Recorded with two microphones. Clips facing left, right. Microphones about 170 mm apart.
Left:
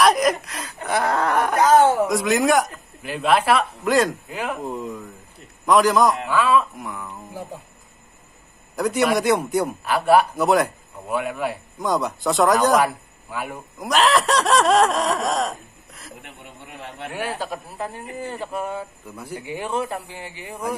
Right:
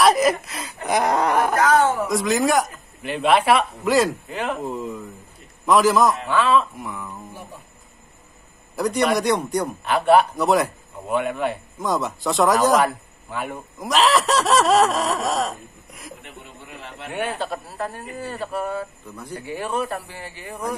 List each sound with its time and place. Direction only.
0.0 s speech: 5° right (ahead or behind)
1.7 s a sound: 25° left (ahead or behind)
2.0 s a man's voice: centre (ahead or behind)
6.2 s speech: 10° left (ahead or behind)
6.8 s a man's voice: centre (ahead or behind)
8.7 s a man's voice: centre (ahead or behind)
17.1 s speech: 5° left (ahead or behind)